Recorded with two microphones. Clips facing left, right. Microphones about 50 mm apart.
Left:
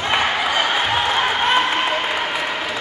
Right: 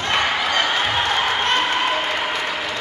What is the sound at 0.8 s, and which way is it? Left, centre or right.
Applause, centre.